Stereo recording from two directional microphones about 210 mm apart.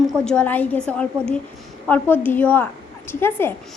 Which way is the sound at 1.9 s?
10° left (ahead or behind).